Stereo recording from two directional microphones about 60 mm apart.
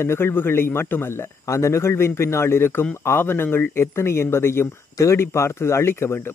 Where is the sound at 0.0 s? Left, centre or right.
Left.